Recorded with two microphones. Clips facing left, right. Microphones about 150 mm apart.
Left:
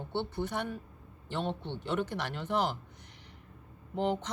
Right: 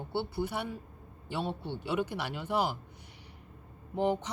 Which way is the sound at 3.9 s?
10° right (ahead or behind).